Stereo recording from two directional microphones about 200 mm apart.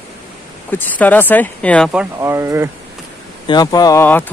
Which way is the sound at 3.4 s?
20° left (ahead or behind).